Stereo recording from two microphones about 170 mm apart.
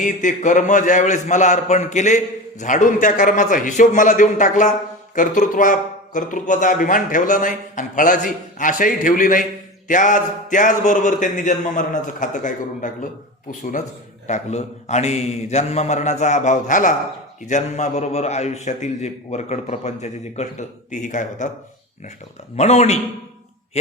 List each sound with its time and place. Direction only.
0.0 s a man's voice: 45° left (ahead or behind)
22.5 s a man's voice: 40° left (ahead or behind)